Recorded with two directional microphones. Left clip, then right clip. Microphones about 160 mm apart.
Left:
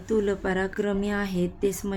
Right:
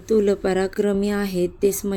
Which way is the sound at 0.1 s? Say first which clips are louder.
Right 6 dB; 30° right (ahead or behind).